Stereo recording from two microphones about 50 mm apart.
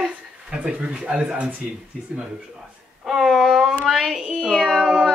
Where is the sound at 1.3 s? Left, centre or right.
Right.